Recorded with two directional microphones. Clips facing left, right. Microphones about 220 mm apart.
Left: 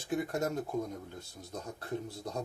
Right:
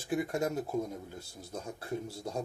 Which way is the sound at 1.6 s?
25° right (ahead or behind).